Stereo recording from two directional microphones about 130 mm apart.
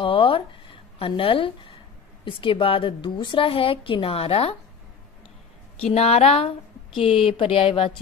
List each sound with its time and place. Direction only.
0.0 s a sound: 45° left (ahead or behind)
2.2 s a woman's voice: 40° left (ahead or behind)
5.8 s a woman's voice: 55° left (ahead or behind)